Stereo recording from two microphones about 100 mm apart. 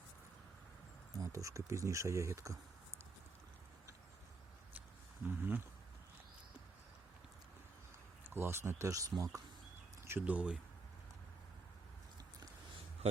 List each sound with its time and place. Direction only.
1.1 s speech: 35° right (ahead or behind)
5.4 s speech: 20° right (ahead or behind)
8.3 s speech: 25° right (ahead or behind)
10.0 s speech: 20° right (ahead or behind)